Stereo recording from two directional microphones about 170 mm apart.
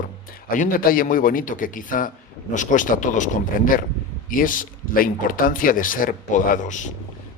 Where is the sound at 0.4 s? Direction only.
55° left (ahead or behind).